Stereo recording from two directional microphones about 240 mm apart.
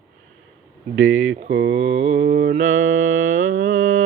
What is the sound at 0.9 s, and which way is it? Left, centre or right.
Speech, right.